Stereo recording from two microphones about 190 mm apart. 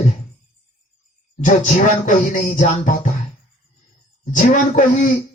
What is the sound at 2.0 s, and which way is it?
Speech, 45° left (ahead or behind).